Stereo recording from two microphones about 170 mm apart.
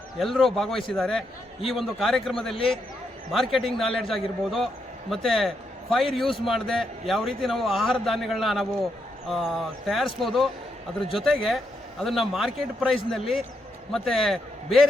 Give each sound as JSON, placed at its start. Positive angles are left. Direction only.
{"t": 0.2, "sound": "a man's voice", "side_deg": 0}